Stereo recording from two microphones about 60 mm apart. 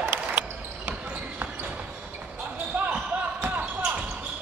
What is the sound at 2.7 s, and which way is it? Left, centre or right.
Basketball bounce, right.